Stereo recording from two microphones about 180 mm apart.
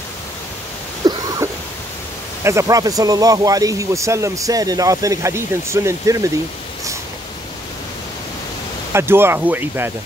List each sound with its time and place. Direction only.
1.0 s a sound: 20° right (ahead or behind)
2.4 s speech: 15° right (ahead or behind)
8.9 s speech: 15° right (ahead or behind)